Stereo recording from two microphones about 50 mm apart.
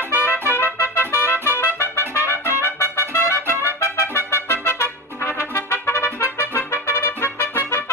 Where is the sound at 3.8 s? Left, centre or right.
Left.